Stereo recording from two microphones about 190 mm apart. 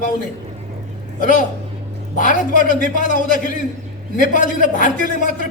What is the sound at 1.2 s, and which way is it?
A man's voice, 45° left (ahead or behind).